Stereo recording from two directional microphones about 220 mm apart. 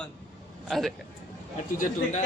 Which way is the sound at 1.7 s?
35° left (ahead or behind).